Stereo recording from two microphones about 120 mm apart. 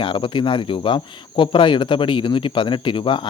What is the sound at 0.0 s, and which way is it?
Speech, 45° left (ahead or behind).